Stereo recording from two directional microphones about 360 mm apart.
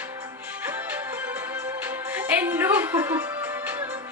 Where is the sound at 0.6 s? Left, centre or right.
Centre.